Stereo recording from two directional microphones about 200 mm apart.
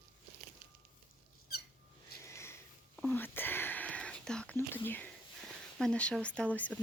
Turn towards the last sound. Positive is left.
turn(degrees=5)  # may be behind; listen again after turning